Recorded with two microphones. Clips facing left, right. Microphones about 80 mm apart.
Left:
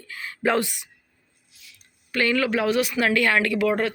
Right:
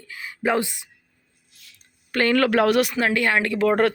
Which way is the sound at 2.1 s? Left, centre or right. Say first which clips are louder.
Right 4 dB; right.